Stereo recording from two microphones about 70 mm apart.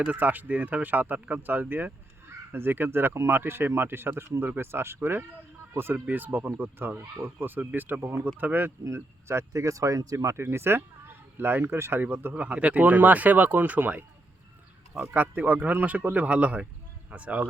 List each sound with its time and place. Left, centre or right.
0.1 s speech: right
9.2 s speech: right
10.3 s speech: right
12.3 s speech: centre
15.1 s speech: right